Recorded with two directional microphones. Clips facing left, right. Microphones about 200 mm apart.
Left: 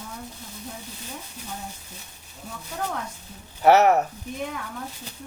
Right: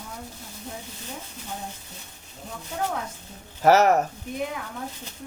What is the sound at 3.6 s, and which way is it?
Speech, 45° right (ahead or behind).